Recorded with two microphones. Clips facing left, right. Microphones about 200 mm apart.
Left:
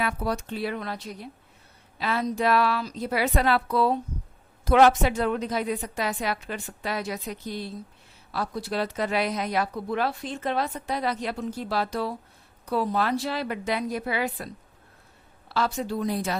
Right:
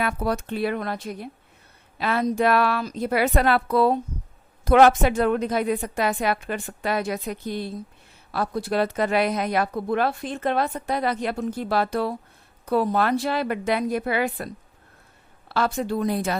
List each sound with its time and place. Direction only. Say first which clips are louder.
0.0 s speech: right 3 dB; 55° right (ahead or behind)